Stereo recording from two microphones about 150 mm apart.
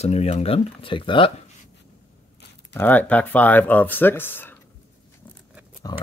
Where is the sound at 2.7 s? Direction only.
10° left (ahead or behind).